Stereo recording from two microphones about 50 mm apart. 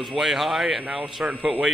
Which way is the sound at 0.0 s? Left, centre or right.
Centre.